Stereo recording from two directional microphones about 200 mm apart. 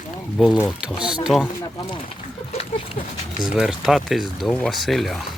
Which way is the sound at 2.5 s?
30° left (ahead or behind).